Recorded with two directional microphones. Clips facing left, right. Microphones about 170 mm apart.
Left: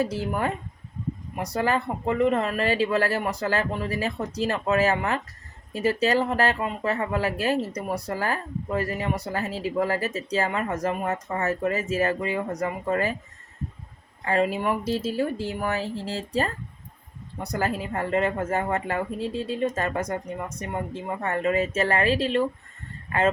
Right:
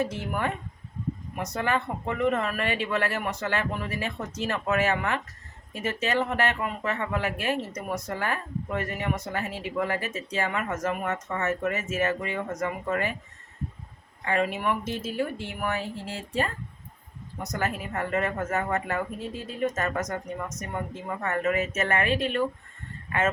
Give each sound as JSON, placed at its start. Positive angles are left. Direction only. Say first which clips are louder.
{"t": 0.1, "sound": "speech", "louder": "left 3 dB", "side_deg": 35}
{"t": 14.3, "sound": "speech", "louder": "left 3 dB", "side_deg": 30}